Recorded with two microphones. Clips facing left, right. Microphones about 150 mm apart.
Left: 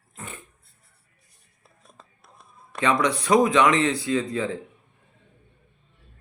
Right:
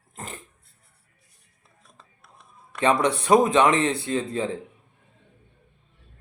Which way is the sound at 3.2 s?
30° right (ahead or behind).